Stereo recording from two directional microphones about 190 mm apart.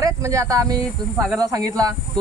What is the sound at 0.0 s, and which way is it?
Speech, 15° right (ahead or behind).